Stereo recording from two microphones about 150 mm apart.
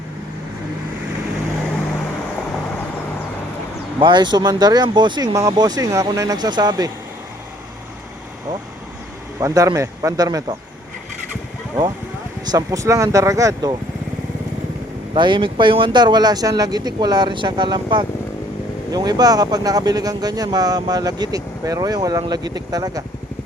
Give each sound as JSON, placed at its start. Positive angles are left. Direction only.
{"t": 4.0, "sound": "speech", "side_deg": -30}
{"t": 9.4, "sound": "speech", "side_deg": -20}
{"t": 12.5, "sound": "speech", "side_deg": -25}
{"t": 15.1, "sound": "speech", "side_deg": -30}